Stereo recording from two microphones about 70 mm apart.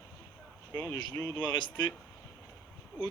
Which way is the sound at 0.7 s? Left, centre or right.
Left.